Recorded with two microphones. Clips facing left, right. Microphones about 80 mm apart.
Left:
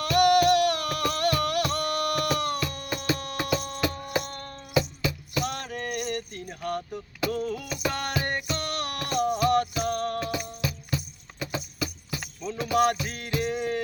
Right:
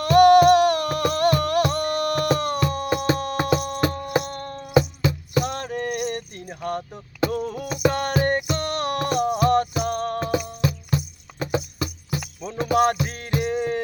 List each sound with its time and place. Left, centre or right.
0.0 s music: right
3.8 s music: right
5.4 s a sound: right
7.4 s music: right
11.5 s clip-clop: right
12.7 s music: right